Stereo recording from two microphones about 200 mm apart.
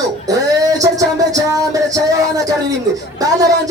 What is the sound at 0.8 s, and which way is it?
Speech, 15° right (ahead or behind).